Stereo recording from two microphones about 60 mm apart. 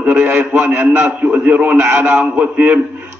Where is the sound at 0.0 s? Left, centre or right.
Right.